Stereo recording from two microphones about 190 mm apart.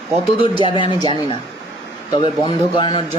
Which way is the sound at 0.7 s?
25° left (ahead or behind).